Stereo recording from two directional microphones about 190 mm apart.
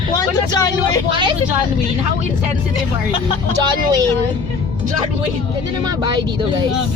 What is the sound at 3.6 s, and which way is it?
Speech, 20° right (ahead or behind).